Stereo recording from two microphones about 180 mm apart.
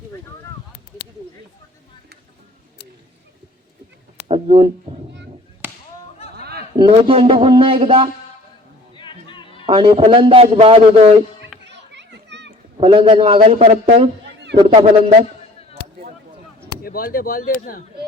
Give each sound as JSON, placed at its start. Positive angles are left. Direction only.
{"t": 4.3, "sound": "a sound", "side_deg": -30}
{"t": 5.6, "sound": "whip", "side_deg": -10}
{"t": 6.3, "sound": "a sound", "side_deg": -60}
{"t": 6.7, "sound": "a man's voice", "side_deg": -30}
{"t": 9.0, "sound": "chatter", "side_deg": 25}
{"t": 9.6, "sound": "a man's voice", "side_deg": -30}
{"t": 11.7, "sound": "children playing", "side_deg": -75}
{"t": 12.7, "sound": "a man's voice", "side_deg": -30}
{"t": 16.8, "sound": "speech", "side_deg": 55}